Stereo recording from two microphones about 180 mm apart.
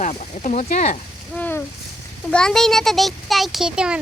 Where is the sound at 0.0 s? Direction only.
40° left (ahead or behind).